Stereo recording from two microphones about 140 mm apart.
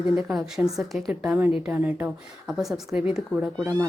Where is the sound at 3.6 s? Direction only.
25° right (ahead or behind).